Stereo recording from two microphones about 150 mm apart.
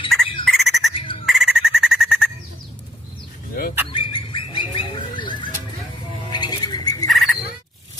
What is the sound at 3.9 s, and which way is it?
Bird, 35° left (ahead or behind).